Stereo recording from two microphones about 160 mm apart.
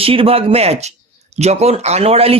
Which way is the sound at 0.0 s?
35° right (ahead or behind).